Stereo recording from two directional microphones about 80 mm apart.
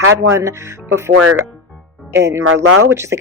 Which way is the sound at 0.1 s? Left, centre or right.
Right.